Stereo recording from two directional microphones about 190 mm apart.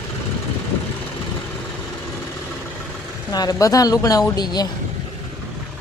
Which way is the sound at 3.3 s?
20° left (ahead or behind).